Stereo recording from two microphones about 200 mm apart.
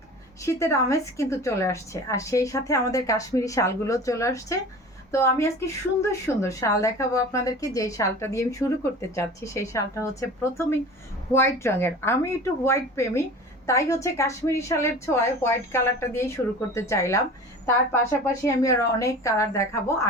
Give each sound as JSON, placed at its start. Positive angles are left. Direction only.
{"t": 0.4, "sound": "speech", "side_deg": 15}
{"t": 18.4, "sound": "speech", "side_deg": 15}